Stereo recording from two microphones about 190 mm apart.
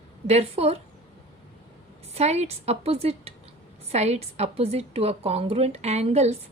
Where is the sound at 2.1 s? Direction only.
35° right (ahead or behind).